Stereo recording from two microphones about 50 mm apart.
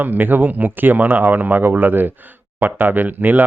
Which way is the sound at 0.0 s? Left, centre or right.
Right.